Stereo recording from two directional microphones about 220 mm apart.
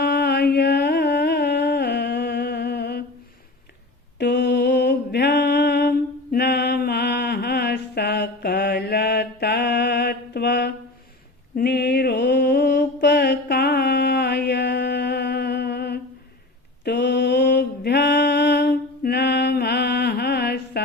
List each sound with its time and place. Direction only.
0.0 s music: 45° left (ahead or behind)
4.2 s a sound: 50° left (ahead or behind)
11.5 s mantra: 50° left (ahead or behind)